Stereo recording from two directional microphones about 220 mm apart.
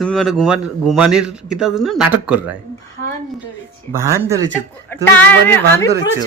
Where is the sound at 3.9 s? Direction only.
10° right (ahead or behind).